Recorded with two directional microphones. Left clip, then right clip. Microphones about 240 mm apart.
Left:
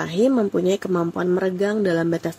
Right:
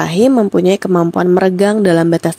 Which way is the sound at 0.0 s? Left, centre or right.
Right.